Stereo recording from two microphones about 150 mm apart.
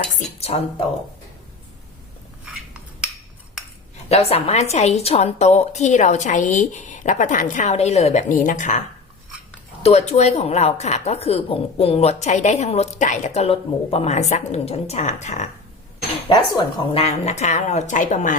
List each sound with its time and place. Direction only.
0.3 s speech: 40° left (ahead or behind)
3.6 s cutlery: 5° right (ahead or behind)
4.1 s a woman's voice: 45° left (ahead or behind)
9.8 s a woman's voice: 45° left (ahead or behind)
16.3 s a woman's voice: 30° left (ahead or behind); by 18.3 s 55° left (ahead or behind)